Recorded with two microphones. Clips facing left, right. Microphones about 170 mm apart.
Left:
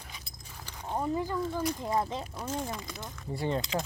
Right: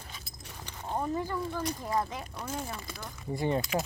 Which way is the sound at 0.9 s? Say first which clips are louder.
Left 1 dB; 15° left (ahead or behind).